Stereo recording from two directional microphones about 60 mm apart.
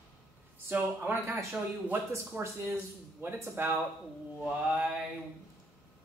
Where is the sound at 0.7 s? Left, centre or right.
Right.